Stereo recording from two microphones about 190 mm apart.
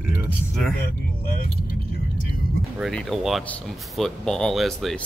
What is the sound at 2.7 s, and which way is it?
Speech, centre (ahead or behind).